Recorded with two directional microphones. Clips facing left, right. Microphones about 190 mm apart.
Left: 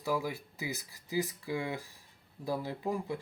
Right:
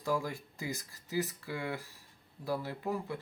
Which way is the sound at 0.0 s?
10° left (ahead or behind).